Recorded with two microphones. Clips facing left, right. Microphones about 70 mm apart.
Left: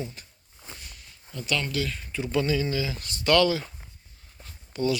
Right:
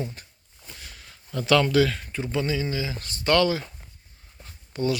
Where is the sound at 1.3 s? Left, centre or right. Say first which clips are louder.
Right 9 dB; right.